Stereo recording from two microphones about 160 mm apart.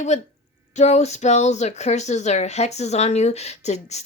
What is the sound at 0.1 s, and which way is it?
Speech, 45° left (ahead or behind).